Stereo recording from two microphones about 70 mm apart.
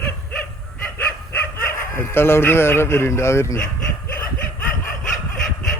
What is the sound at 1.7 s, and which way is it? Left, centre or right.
Chicken, left.